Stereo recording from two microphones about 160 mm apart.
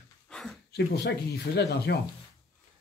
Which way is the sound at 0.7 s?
90° left.